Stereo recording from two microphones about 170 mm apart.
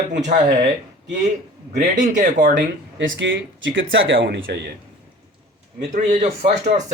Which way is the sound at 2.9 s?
90° right.